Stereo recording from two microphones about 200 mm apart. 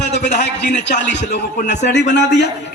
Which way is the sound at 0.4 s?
60° left (ahead or behind).